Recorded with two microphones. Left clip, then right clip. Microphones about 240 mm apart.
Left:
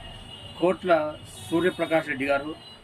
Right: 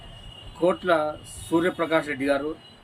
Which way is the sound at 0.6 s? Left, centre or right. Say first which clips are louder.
Even; centre.